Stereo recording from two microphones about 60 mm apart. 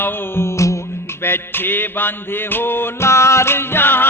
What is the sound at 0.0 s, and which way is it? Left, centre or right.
Music, left.